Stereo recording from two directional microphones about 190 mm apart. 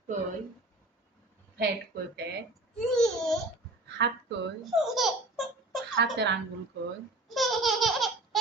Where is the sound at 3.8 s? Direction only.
65° right (ahead or behind).